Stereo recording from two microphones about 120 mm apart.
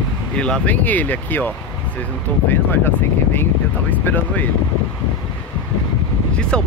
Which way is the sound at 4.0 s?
15° left (ahead or behind).